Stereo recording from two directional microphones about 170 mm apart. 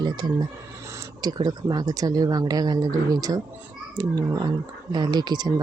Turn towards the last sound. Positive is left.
turn(degrees=-25)  # may be behind; listen again after turning